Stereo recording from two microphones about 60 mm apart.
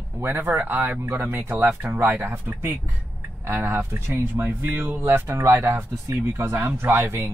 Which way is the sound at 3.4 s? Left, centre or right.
Right.